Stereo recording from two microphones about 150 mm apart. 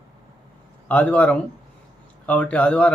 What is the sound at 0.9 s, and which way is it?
A man's voice, 10° left (ahead or behind).